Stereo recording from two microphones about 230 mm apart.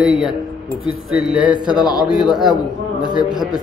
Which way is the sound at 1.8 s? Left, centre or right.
Centre.